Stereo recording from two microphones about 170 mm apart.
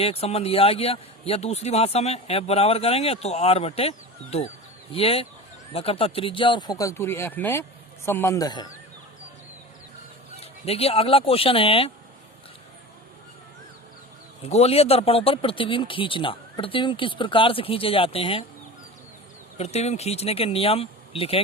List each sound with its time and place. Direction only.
0.0 s a man's voice: 35° left (ahead or behind)
10.4 s a man's voice: 35° left (ahead or behind)
14.4 s a man's voice: 40° left (ahead or behind)
19.5 s a man's voice: 40° left (ahead or behind)